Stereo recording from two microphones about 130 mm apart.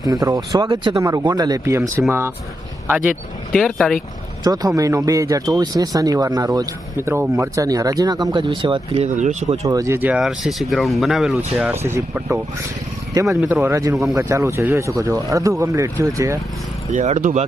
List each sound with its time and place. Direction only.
0.0 s speech: 25° right (ahead or behind)
3.5 s speech: centre (ahead or behind)
4.4 s speech: 30° right (ahead or behind)
9.0 s speech: 65° right (ahead or behind)
9.6 s speech: 25° right (ahead or behind); by 11.7 s 5° right (ahead or behind)
11.7 s speech: 20° right (ahead or behind)
16.9 s speech: 70° right (ahead or behind)